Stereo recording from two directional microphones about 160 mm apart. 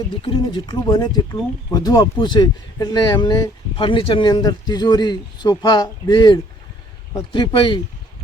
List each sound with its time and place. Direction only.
0.2 s speech: 30° left (ahead or behind)